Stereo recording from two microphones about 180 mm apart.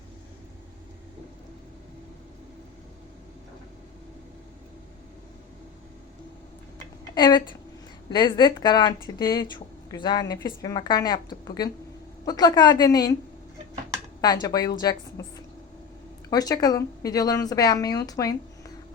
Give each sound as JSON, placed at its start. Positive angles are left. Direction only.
{"t": 7.2, "sound": "speech", "side_deg": 25}
{"t": 14.2, "sound": "speech", "side_deg": 20}
{"t": 15.2, "sound": "a sound", "side_deg": 20}
{"t": 16.3, "sound": "speech", "side_deg": 20}